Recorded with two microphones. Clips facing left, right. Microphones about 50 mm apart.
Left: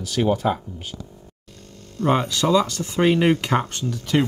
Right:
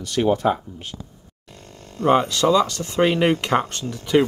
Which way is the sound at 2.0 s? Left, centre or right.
Centre.